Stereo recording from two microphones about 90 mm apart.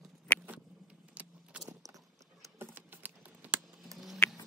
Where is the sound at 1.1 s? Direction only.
15° right (ahead or behind).